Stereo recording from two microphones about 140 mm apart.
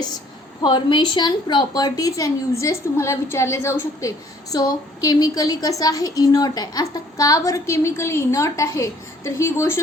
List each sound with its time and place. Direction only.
0.6 s a woman's voice: 35° left (ahead or behind); by 9.8 s 20° left (ahead or behind)